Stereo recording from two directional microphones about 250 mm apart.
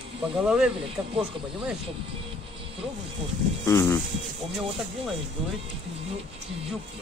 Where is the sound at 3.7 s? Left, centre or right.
Centre.